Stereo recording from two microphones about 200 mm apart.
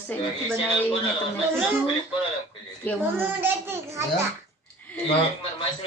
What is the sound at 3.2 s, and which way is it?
Speech, 10° right (ahead or behind).